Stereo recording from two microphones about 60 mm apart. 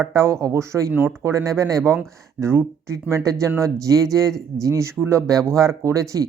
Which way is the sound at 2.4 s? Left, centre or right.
Right.